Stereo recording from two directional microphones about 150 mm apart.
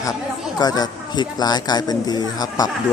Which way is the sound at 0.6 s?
25° left (ahead or behind).